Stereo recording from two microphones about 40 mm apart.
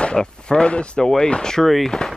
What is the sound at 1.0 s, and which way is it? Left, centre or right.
Speech, centre.